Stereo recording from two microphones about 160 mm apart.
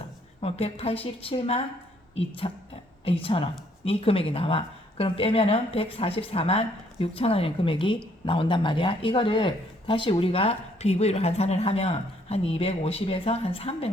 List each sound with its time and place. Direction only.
0.4 s a woman's voice: 40° left (ahead or behind)